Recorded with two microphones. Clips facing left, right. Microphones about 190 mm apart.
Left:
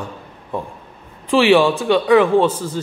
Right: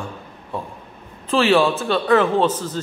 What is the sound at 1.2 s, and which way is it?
A man's voice, 15° left (ahead or behind).